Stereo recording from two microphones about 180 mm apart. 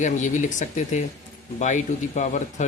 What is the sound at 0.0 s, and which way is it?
Speech, 45° left (ahead or behind).